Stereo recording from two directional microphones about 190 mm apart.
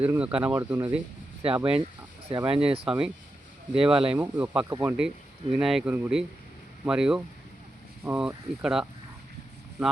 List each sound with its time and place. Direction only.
0.0 s speech: 5° right (ahead or behind)
2.5 s speech: 30° right (ahead or behind)
2.8 s speech: 5° right (ahead or behind)